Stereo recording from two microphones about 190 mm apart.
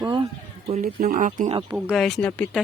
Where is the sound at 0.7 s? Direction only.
50° right (ahead or behind).